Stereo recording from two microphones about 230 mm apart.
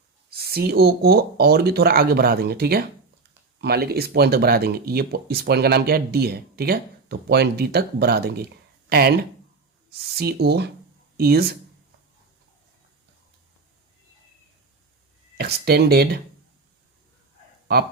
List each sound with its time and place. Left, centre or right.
0.3 s speech: right
10.2 s speech: right
15.4 s speech: right